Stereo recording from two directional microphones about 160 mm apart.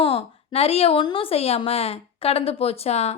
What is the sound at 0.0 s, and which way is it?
A woman's voice, 35° left (ahead or behind).